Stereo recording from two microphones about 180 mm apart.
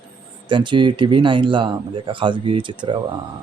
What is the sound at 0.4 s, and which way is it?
Speech, 25° right (ahead or behind).